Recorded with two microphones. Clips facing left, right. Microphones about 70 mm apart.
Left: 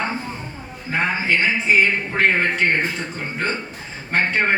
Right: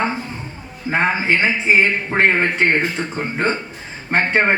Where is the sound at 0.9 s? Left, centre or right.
Right.